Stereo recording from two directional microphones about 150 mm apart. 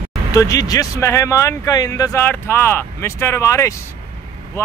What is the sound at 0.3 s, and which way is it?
Speech, 20° left (ahead or behind).